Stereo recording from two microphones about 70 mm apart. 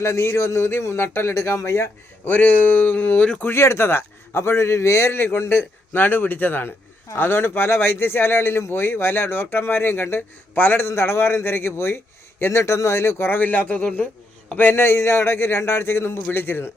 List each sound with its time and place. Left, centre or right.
0.0 s speech: left
2.3 s speech: left
3.4 s speech: left; by 14.1 s centre
14.5 s speech: left